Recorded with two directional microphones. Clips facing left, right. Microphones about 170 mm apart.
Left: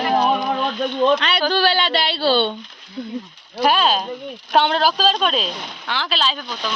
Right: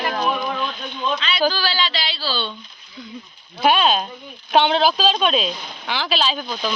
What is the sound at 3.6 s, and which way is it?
A woman's voice, 5° right (ahead or behind).